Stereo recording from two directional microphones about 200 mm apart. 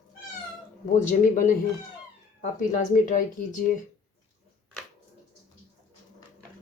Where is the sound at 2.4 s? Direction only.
40° left (ahead or behind).